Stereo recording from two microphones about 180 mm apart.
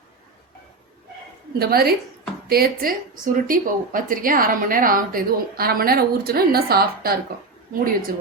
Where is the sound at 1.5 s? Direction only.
60° right (ahead or behind).